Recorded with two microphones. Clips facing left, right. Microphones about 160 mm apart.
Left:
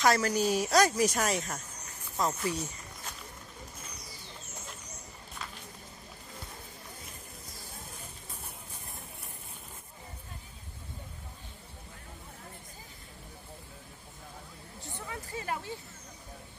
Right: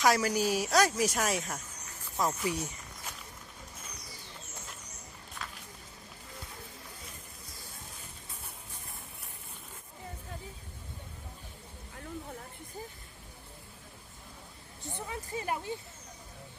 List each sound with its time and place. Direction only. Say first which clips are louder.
0.0 s a woman's voice: left 1 dB; 10° right (ahead or behind)
5.4 s music: even; centre (ahead or behind)
14.8 s a sound: right 3 dB; 20° right (ahead or behind)